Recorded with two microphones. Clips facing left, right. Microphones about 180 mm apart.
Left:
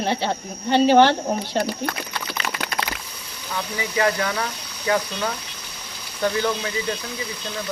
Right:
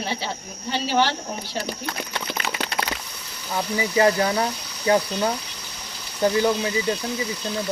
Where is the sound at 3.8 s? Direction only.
25° right (ahead or behind).